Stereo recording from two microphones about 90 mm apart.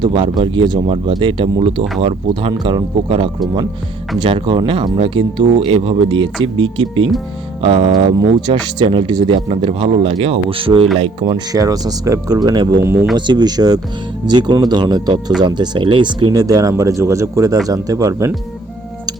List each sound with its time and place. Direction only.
0.0 s speech: 60° right (ahead or behind); by 2.5 s 85° right
2.5 s speech: 60° right (ahead or behind)
11.2 s speech: 50° right (ahead or behind)
12.8 s speech: 30° right (ahead or behind)
13.1 s speech: 55° right (ahead or behind)
16.3 s speech: 40° right (ahead or behind)